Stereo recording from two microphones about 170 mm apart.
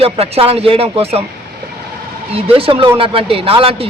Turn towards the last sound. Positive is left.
turn(degrees=-35)  # may be behind; listen again after turning